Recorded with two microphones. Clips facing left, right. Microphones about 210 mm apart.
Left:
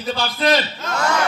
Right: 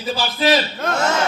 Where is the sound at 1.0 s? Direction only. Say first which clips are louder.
Even; 25° right (ahead or behind).